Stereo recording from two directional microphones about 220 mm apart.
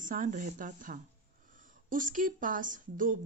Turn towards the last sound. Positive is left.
turn(degrees=-35)  # may be behind; listen again after turning